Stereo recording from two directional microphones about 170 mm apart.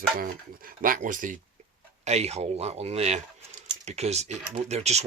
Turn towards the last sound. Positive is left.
turn(degrees=-40)  # may be behind; listen again after turning